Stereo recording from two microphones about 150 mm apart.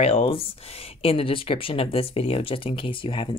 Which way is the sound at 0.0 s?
40° left (ahead or behind).